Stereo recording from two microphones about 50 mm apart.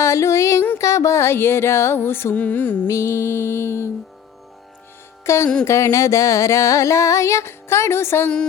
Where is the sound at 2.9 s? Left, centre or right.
Left.